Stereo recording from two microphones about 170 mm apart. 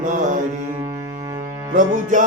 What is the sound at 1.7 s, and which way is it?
Music, 45° right (ahead or behind).